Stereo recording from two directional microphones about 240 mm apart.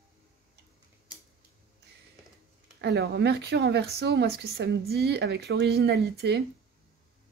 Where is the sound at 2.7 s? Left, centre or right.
Right.